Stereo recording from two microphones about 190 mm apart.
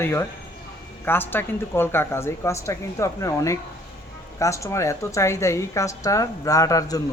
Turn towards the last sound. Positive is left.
turn(degrees=20)  # may be behind; listen again after turning